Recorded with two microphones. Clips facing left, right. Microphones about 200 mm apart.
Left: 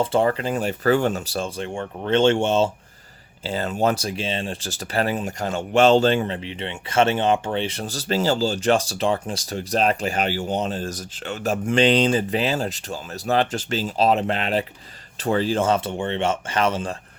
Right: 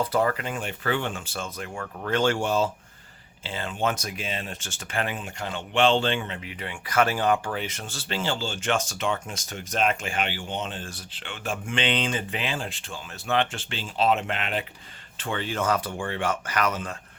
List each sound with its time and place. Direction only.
0.0 s speech: 25° left (ahead or behind)
3.4 s speech: 40° left (ahead or behind)